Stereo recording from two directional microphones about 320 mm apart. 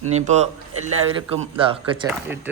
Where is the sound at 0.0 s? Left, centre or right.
Right.